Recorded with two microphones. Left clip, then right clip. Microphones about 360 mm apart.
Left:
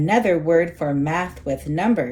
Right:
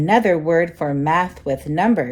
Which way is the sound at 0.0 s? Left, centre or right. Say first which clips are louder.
Right 3 dB; right.